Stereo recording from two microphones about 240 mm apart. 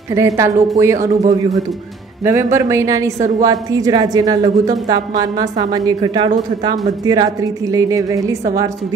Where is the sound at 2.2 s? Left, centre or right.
Centre.